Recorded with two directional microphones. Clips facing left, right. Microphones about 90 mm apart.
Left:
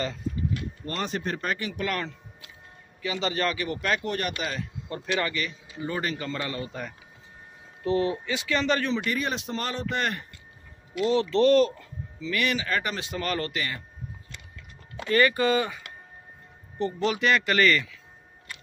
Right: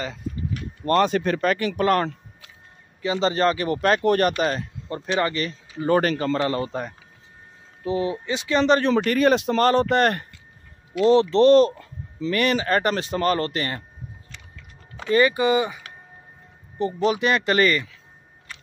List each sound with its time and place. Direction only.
0.8 s speech: 80° right
1.8 s speech: 45° right (ahead or behind)
3.0 s speech: 30° right (ahead or behind)
4.8 s speech: 30° right (ahead or behind)
5.8 s a man's voice: 65° right (ahead or behind)
6.1 s speech: 40° right (ahead or behind)
7.8 s speech: 15° right (ahead or behind)
8.9 s speech: 60° right (ahead or behind)
11.1 s speech: 30° right (ahead or behind)
12.2 s speech: 45° right (ahead or behind)
15.0 s speech: 20° right (ahead or behind)
17.0 s speech: 20° right (ahead or behind)